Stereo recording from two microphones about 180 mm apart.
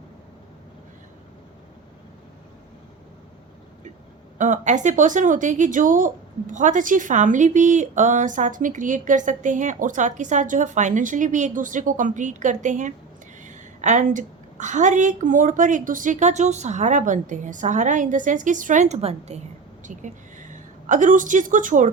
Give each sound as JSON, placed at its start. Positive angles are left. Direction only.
{"t": 4.4, "sound": "a woman's voice", "side_deg": -45}